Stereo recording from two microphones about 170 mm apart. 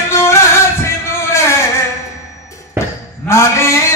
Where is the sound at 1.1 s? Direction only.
15° left (ahead or behind).